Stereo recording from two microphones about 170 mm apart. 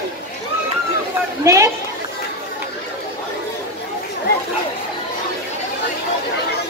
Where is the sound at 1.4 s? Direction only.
20° right (ahead or behind).